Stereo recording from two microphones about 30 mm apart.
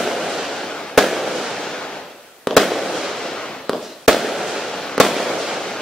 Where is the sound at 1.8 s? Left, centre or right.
Left.